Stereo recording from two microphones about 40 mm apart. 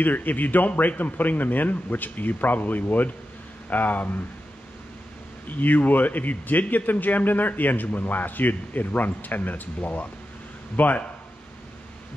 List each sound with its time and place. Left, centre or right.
0.0 s a man's voice: left
5.5 s a man's voice: left
10.8 s a man's voice: left